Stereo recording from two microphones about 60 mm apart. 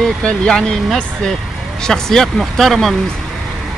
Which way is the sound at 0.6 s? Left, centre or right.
Centre.